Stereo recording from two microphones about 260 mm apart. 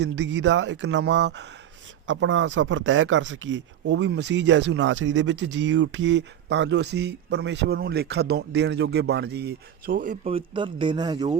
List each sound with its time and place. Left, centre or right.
0.0 s speech: right; by 11.3 s centre